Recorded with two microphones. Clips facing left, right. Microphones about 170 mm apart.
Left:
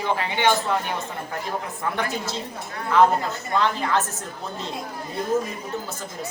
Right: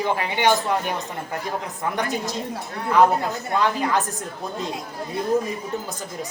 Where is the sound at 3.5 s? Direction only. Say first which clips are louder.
Right 1 dB; 10° right (ahead or behind).